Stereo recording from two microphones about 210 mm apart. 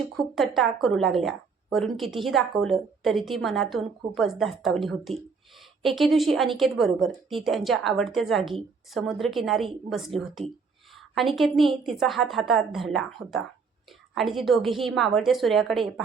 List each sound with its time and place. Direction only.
0.3 s a woman's voice: centre (ahead or behind)
11.1 s a woman's voice: centre (ahead or behind)